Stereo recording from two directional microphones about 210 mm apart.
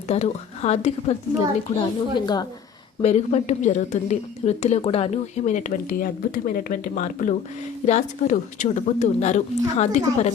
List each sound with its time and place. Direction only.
0.1 s speech: 30° left (ahead or behind)
3.0 s speech: 30° left (ahead or behind)